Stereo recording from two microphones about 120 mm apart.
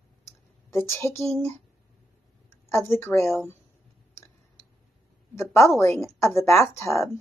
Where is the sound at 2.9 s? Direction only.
20° left (ahead or behind).